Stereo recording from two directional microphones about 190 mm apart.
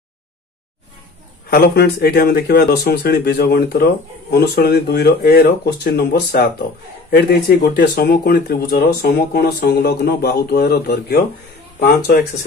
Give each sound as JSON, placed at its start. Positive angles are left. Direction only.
{"t": 1.5, "sound": "speech", "side_deg": 55}